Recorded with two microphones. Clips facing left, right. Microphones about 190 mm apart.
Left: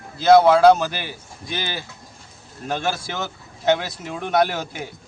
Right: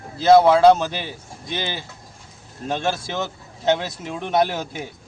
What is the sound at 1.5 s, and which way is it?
Speech, 20° right (ahead or behind).